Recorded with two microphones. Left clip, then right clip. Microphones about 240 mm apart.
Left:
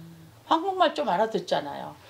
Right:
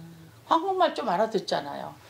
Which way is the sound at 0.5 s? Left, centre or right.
Left.